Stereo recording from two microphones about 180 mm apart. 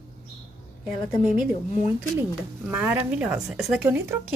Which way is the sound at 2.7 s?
10° right (ahead or behind).